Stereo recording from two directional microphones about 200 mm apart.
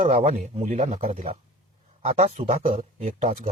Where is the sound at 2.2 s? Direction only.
30° right (ahead or behind).